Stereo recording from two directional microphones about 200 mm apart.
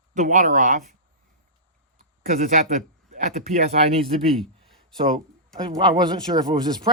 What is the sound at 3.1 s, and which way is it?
Speech, 35° right (ahead or behind).